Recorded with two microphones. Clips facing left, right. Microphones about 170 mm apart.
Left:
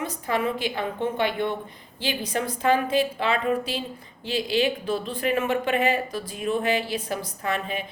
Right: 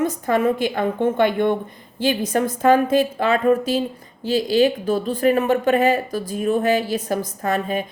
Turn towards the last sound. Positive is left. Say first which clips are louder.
# right 6 dB
turn(degrees=-45)  # may be behind; listen again after turning